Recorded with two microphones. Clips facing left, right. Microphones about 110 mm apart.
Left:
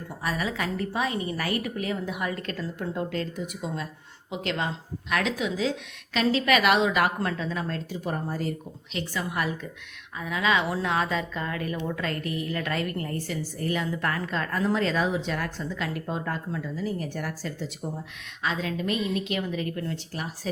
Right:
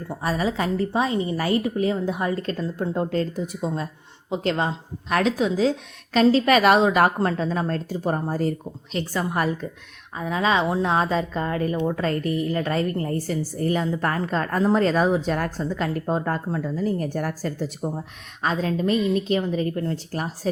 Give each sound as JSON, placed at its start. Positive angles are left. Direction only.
{"t": 0.1, "sound": "a woman's voice", "side_deg": -30}